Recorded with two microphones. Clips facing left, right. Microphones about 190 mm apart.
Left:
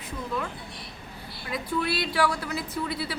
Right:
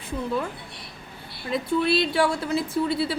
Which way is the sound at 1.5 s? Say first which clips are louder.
Right 6 dB; 25° right (ahead or behind).